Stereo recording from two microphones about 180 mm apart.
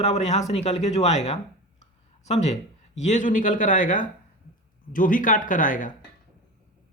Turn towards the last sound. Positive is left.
turn(degrees=45)  # may be behind; listen again after turning